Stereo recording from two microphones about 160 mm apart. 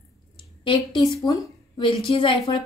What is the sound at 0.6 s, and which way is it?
A woman's voice, 30° left (ahead or behind).